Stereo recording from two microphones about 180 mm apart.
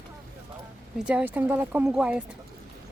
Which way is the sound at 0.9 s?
5° right (ahead or behind).